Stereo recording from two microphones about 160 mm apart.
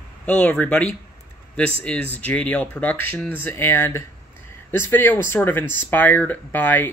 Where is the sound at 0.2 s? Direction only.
5° left (ahead or behind).